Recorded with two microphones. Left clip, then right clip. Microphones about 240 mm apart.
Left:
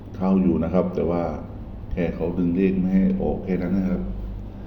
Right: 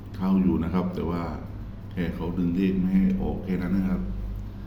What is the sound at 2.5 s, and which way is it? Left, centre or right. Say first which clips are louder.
A man's voice: left 4 dB; centre.